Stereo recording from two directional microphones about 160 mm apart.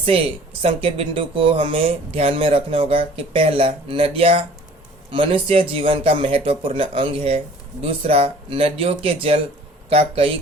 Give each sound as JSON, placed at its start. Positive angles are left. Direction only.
{"t": 0.0, "sound": "speech", "side_deg": -35}